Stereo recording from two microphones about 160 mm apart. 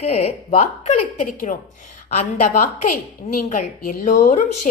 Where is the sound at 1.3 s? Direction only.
55° left (ahead or behind).